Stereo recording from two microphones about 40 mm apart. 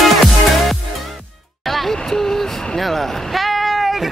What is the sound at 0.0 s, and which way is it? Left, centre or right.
Music, centre.